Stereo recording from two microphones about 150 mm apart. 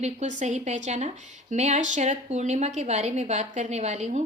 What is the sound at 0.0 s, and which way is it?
A woman's voice, 50° right (ahead or behind).